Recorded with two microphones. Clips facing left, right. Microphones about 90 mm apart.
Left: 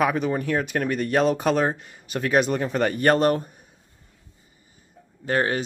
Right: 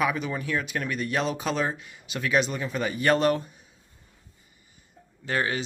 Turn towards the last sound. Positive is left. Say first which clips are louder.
# left 4 dB
turn(degrees=40)  # may be behind; listen again after turning